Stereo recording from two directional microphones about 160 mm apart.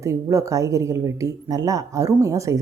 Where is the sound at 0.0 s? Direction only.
20° right (ahead or behind).